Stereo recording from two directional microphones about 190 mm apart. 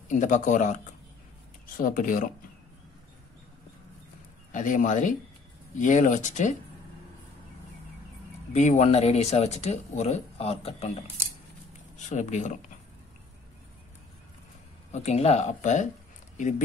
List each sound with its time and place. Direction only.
0.1 s speech: 40° left (ahead or behind)
1.8 s speech: 45° left (ahead or behind)
4.5 s speech: 40° left (ahead or behind)
8.5 s speech: 35° left (ahead or behind)
12.1 s speech: 40° left (ahead or behind)
14.9 s speech: 35° left (ahead or behind)